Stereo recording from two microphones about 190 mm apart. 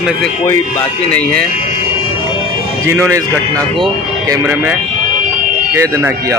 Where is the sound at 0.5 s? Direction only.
10° left (ahead or behind).